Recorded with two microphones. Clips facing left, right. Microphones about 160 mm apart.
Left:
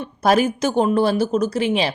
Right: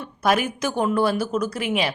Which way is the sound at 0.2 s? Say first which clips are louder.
Left 4 dB; 30° left (ahead or behind).